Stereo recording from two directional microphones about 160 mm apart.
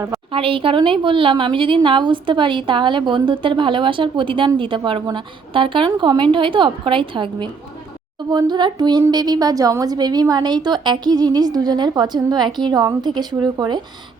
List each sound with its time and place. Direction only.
0.3 s a woman's voice: 35° right (ahead or behind)